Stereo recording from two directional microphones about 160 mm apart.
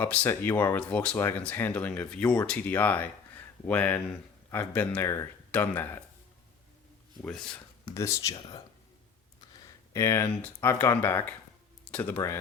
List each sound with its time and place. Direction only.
0.0 s speech: 10° left (ahead or behind)
7.2 s speech: 5° left (ahead or behind)
7.9 s speech: 20° left (ahead or behind)
8.4 s speech: 30° left (ahead or behind)